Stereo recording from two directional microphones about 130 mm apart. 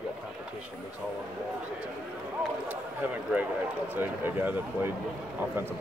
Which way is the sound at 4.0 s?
15° right (ahead or behind).